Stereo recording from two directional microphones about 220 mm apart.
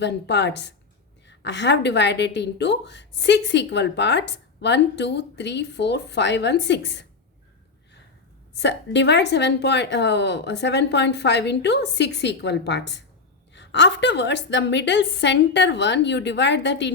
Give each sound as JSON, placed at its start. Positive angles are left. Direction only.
{"t": 0.0, "sound": "a woman's voice", "side_deg": 50}
{"t": 8.5, "sound": "a woman's voice", "side_deg": 50}